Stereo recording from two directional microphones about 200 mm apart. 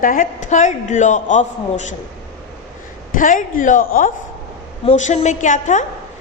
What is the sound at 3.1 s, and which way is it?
A woman's voice, 40° left (ahead or behind).